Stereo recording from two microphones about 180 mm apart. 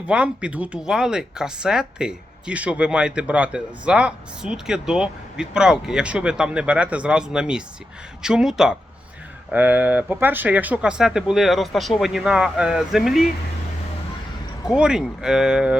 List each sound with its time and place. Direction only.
0.1 s speech: 5° right (ahead or behind)
14.7 s speech: 5° right (ahead or behind)